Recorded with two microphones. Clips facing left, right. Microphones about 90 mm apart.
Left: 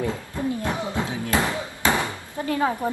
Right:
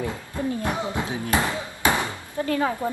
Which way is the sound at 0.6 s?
20° right (ahead or behind).